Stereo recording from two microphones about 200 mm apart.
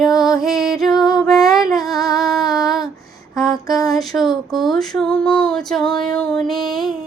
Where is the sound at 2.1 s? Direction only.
Centre (ahead or behind).